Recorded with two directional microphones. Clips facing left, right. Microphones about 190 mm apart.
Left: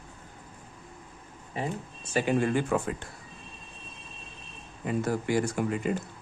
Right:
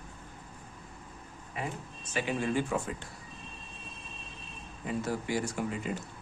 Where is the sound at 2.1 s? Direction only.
50° left (ahead or behind).